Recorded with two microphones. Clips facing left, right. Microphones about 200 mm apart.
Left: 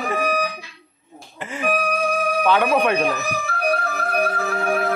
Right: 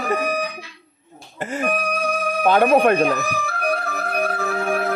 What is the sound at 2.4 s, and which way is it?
Speech, 45° right (ahead or behind).